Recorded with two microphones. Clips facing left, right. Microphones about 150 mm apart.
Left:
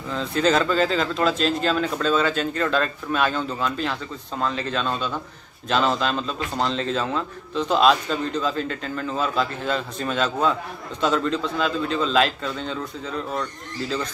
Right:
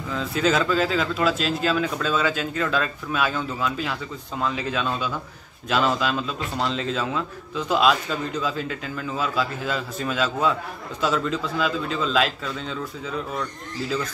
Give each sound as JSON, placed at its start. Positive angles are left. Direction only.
{"t": 0.1, "sound": "a man's voice", "side_deg": -5}